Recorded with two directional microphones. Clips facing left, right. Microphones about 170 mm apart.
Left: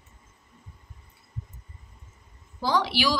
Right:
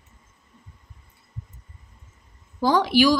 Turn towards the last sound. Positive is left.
turn(degrees=-45)  # may be behind; listen again after turning